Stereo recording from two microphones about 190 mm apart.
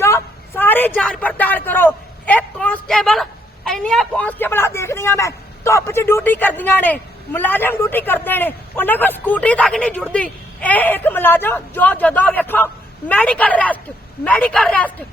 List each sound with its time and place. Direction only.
0.0 s a man's voice: 15° left (ahead or behind)